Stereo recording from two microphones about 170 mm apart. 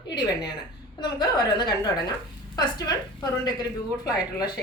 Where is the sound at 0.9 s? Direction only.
25° left (ahead or behind).